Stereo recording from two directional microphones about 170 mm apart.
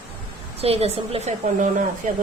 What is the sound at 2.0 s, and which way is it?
Speech, 50° right (ahead or behind).